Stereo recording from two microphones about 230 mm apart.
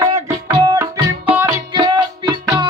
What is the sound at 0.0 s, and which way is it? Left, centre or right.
Music, centre.